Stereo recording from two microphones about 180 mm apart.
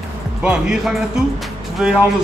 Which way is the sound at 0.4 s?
5° right (ahead or behind).